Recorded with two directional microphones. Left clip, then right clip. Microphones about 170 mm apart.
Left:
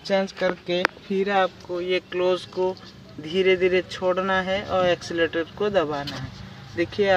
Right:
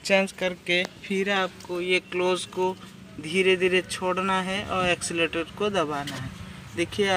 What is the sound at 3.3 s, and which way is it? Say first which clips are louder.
Speech: left 2 dB; 15° right (ahead or behind).